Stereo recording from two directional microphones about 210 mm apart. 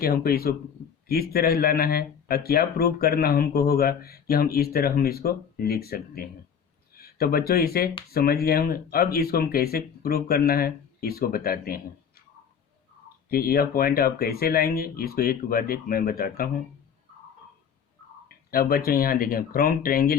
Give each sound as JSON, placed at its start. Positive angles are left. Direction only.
{"t": 0.0, "sound": "speech", "side_deg": 45}
{"t": 13.3, "sound": "speech", "side_deg": 45}
{"t": 18.5, "sound": "speech", "side_deg": 45}